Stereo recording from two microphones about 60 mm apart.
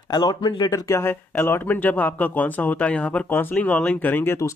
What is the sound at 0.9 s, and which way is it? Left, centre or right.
Speech, left.